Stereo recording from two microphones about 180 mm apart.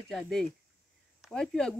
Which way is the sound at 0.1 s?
5° left (ahead or behind).